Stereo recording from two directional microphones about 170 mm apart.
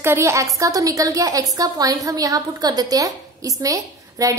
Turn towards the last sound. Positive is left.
turn(degrees=-20)  # may be behind; listen again after turning